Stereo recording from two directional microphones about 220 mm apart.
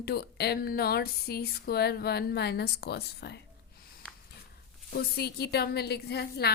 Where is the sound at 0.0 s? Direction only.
45° left (ahead or behind).